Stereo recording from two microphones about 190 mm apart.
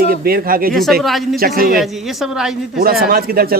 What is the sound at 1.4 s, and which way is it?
Speech, 50° right (ahead or behind).